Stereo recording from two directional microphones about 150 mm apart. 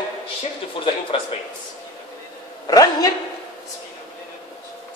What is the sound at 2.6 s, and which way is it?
Speech, 25° left (ahead or behind).